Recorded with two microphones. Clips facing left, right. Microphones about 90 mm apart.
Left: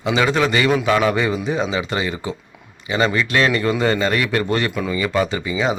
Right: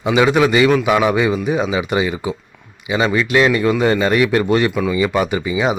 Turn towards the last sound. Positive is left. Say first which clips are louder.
# right 3 dB
turn(degrees=-20)  # may be behind; listen again after turning